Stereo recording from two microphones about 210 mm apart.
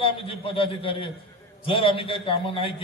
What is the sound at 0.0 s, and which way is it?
A man's voice, 25° left (ahead or behind).